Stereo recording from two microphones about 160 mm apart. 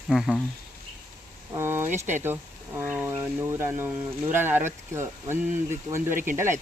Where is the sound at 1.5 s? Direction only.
15° right (ahead or behind).